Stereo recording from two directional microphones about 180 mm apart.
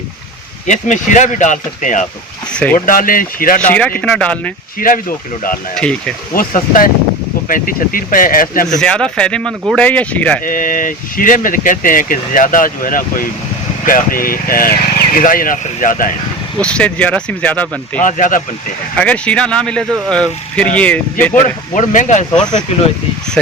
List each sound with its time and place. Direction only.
0.7 s speech: 40° left (ahead or behind)
2.5 s speech: 5° left (ahead or behind)
2.7 s speech: 50° left (ahead or behind)
3.7 s speech: 10° left (ahead or behind)
4.8 s speech: 50° left (ahead or behind)
5.7 s speech: 5° left (ahead or behind)
6.3 s speech: 50° left (ahead or behind)
8.8 s speech: 5° left (ahead or behind)
10.4 s speech: 50° left (ahead or behind)
16.6 s speech: 5° left (ahead or behind)
18.0 s speech: 45° left (ahead or behind)
18.9 s speech: 5° left (ahead or behind)
21.8 s speech: 45° left (ahead or behind)